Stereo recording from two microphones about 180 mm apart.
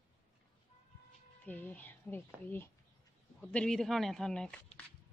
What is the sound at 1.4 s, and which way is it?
A woman's voice, 10° left (ahead or behind).